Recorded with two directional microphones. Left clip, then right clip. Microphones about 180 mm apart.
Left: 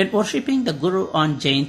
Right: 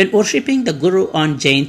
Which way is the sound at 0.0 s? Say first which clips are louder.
Right 6 dB; 5° right (ahead or behind).